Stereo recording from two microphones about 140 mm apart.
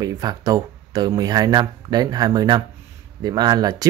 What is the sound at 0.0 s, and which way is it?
Speech, 25° right (ahead or behind).